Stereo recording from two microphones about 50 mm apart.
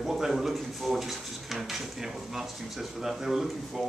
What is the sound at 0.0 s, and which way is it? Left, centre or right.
A man's voice, centre.